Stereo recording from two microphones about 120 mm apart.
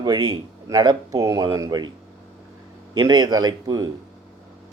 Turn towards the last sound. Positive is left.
turn(degrees=-35)  # may be behind; listen again after turning